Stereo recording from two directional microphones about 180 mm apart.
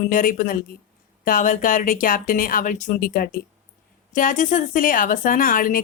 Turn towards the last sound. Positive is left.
turn(degrees=50)  # may be behind; listen again after turning